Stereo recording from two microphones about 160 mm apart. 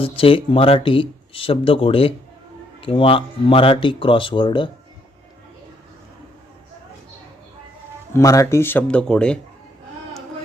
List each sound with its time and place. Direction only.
0.0 s speech: 35° left (ahead or behind)
8.1 s speech: 20° left (ahead or behind)